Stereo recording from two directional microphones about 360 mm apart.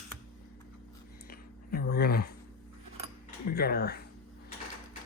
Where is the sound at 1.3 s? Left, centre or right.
Left.